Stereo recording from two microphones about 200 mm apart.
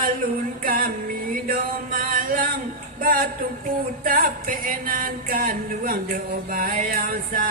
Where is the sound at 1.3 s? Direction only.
45° right (ahead or behind).